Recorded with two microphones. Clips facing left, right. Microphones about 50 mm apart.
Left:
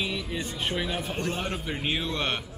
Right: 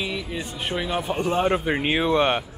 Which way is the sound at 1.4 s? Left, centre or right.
Right.